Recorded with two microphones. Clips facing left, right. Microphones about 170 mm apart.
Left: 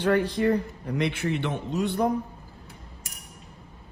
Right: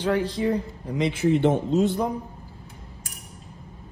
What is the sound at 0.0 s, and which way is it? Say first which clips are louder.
A man's voice: left 1 dB; 60° left (ahead or behind).